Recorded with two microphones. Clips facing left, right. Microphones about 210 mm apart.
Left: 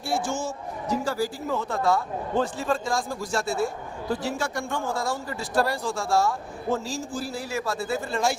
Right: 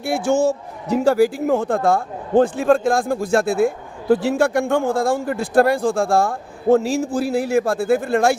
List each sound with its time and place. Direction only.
0.0 s a man's voice: 60° right (ahead or behind)